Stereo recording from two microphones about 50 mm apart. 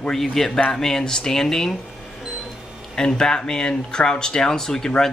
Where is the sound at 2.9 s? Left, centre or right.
Centre.